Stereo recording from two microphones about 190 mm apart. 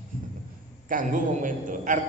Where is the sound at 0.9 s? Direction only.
45° right (ahead or behind).